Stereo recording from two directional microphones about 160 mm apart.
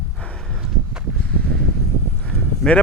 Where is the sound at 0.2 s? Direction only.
5° left (ahead or behind).